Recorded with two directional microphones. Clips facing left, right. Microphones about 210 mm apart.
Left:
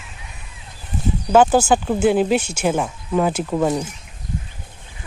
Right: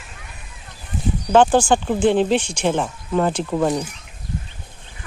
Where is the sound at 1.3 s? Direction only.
5° left (ahead or behind).